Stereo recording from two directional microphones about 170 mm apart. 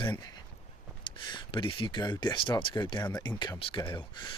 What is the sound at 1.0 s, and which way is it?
Speech, 25° left (ahead or behind).